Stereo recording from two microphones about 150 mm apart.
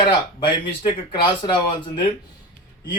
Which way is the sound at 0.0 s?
30° left (ahead or behind).